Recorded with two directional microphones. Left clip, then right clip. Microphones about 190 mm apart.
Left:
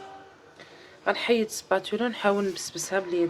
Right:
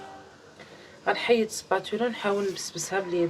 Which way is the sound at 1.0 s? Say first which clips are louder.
Right 1 dB; 60° left (ahead or behind).